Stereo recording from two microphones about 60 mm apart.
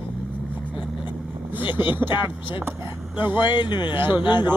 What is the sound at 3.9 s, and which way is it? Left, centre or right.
Speech, right.